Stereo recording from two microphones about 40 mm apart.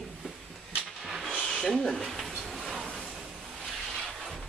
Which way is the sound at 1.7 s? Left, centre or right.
Centre.